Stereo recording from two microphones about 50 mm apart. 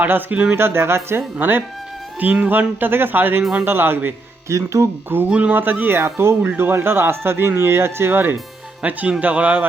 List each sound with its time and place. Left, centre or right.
0.0 s speech: right
0.5 s speech: right
1.4 s speech: right
2.1 s speech: right
3.6 s speech: right
4.4 s speech: right
5.0 s speech: right
5.3 s speech: right
5.9 s speech: right
8.8 s speech: right